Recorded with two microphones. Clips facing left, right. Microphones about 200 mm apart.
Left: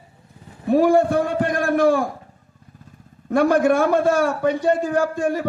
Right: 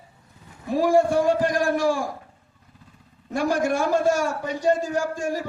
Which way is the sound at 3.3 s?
55° left (ahead or behind).